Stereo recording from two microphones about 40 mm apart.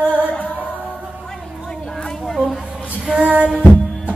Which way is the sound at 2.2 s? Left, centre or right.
Centre.